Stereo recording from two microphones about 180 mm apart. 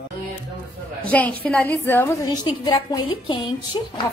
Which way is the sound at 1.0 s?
10° left (ahead or behind).